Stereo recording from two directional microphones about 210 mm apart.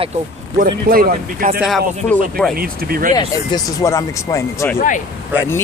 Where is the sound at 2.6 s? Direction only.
45° right (ahead or behind).